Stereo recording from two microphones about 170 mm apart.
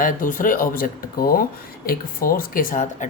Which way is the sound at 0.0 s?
50° left (ahead or behind).